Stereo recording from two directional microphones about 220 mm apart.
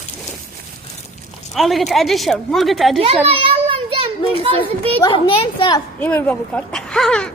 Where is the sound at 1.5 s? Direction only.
Centre (ahead or behind).